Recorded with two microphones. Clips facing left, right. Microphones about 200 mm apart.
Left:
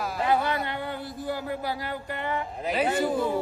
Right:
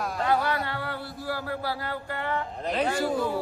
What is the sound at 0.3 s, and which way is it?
Speech, 20° left (ahead or behind).